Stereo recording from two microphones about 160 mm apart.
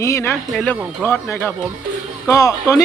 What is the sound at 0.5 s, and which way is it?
Speech, 5° left (ahead or behind).